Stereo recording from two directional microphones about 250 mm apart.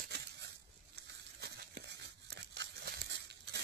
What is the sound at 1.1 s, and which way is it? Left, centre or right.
Crumpling, right.